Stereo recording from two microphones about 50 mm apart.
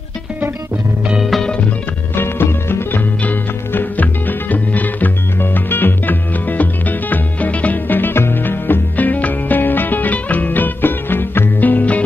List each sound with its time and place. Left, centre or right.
2.1 s music: left
3.3 s music: left